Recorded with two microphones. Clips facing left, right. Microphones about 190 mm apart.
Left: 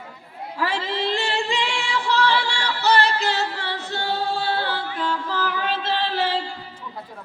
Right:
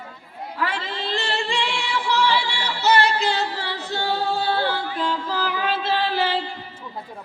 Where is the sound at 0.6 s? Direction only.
25° left (ahead or behind).